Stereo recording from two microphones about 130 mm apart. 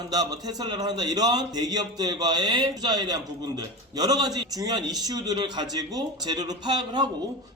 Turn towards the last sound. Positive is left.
turn(degrees=-35)  # may be behind; listen again after turning